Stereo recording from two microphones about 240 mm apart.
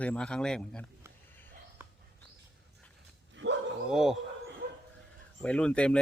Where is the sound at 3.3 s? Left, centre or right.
Right.